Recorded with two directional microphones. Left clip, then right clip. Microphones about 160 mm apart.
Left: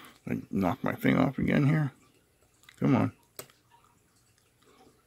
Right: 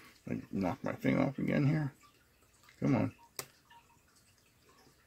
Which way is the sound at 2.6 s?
40° left (ahead or behind).